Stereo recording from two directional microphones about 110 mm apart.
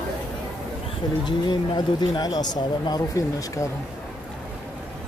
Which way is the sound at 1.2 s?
45° left (ahead or behind).